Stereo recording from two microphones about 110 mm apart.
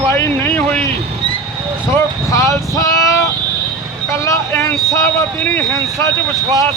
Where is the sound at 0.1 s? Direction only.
20° left (ahead or behind).